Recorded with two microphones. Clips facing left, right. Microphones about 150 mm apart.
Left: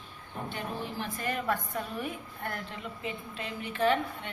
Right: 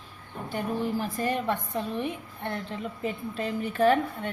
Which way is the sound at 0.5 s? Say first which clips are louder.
Right 9 dB; 40° right (ahead or behind).